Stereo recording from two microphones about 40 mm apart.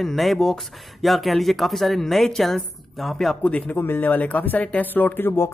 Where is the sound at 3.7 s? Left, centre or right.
Left.